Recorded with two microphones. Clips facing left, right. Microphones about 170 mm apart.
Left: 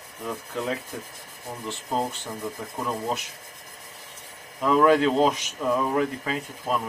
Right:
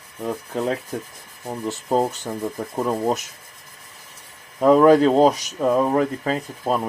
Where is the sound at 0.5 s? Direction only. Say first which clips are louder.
Right 6 dB; 40° right (ahead or behind).